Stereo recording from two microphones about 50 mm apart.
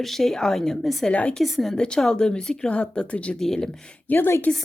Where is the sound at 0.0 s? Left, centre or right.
Centre.